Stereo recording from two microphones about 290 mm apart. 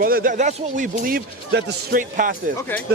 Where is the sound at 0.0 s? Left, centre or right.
Right.